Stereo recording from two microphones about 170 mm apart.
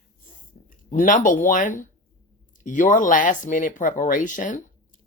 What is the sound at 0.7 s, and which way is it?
Speech, 50° left (ahead or behind).